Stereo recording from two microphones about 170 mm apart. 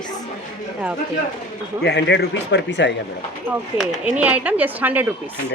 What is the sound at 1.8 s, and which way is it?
Speech, 85° left.